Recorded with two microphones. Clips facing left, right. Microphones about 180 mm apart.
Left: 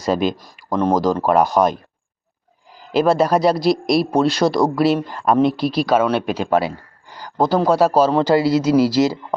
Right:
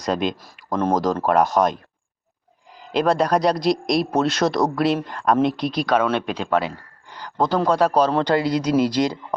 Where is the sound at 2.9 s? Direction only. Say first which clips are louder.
Left 3 dB; 5° left (ahead or behind).